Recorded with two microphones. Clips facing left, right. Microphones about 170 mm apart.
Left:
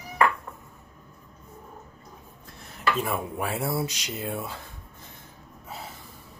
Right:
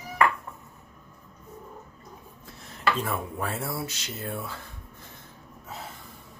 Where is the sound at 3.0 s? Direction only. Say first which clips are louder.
Left 2 dB; 10° left (ahead or behind).